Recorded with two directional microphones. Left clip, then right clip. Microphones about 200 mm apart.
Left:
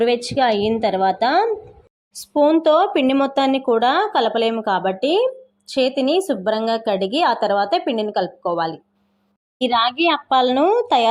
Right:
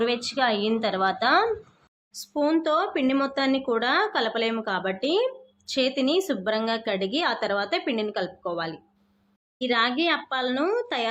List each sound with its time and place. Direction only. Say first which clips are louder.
0.0 s speech: left 7 dB; 20° left (ahead or behind)